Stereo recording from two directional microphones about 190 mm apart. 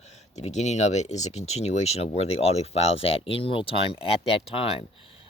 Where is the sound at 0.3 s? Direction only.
35° left (ahead or behind).